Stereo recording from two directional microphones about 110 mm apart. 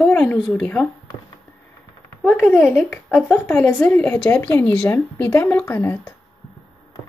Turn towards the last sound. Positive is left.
turn(degrees=25)  # may be behind; listen again after turning